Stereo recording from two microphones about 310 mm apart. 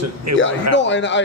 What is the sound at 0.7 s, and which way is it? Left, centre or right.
Speech, left.